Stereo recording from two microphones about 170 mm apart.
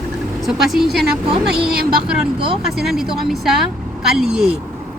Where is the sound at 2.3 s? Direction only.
30° right (ahead or behind).